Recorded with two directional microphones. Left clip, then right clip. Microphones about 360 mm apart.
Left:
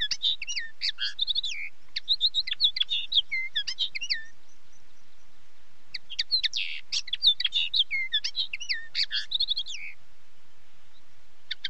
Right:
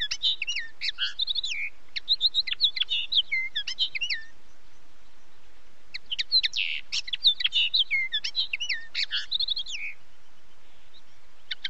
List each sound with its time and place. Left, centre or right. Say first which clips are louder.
0.0 s chirp: right 1 dB; centre
5.9 s chirp: even; centre
11.5 s a sound: right 1 dB; centre